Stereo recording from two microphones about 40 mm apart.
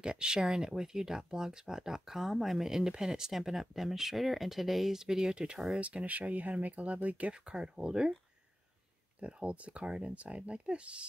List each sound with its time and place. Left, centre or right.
0.0 s speech: right
5.8 s speech: right
7.3 s speech: right
9.2 s speech: right